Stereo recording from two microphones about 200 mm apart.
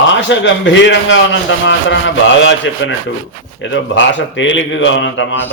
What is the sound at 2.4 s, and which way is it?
A man's voice, 65° left (ahead or behind).